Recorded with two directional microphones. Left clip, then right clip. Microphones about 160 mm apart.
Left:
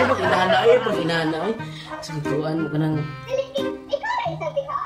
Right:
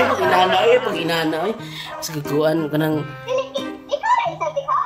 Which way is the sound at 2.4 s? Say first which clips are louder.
Right 9 dB; 45° right (ahead or behind).